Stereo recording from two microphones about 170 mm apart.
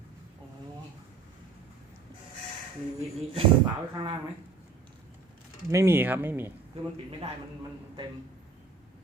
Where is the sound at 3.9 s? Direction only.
25° right (ahead or behind).